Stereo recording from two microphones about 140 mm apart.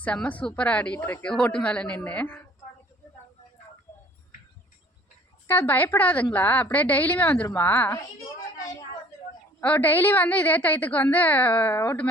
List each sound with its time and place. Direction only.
0.0 s a woman's voice: 10° left (ahead or behind)
5.5 s a woman's voice: 15° left (ahead or behind)
9.6 s a woman's voice: 15° left (ahead or behind)